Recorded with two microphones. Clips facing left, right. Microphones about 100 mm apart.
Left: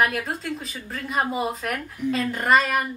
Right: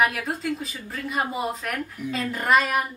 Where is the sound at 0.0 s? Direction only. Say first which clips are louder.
Even; centre (ahead or behind).